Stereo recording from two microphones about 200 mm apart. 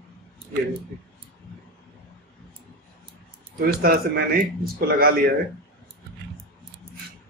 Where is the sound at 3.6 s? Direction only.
45° right (ahead or behind).